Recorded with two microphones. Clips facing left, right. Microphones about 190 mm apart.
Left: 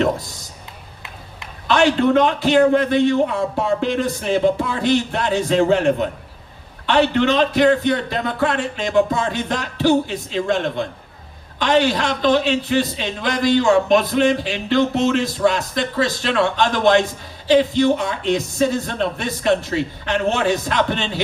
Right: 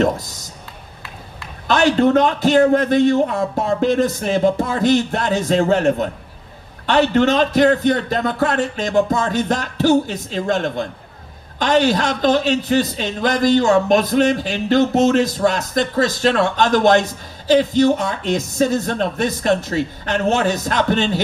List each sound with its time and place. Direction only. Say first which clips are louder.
1.7 s a man's voice: right 1 dB; 40° right (ahead or behind)